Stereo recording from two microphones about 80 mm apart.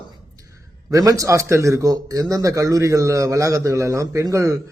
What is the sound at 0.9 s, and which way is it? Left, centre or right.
A man's voice, right.